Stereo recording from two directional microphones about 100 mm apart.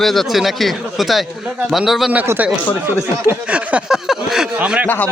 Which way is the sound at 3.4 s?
10° right (ahead or behind).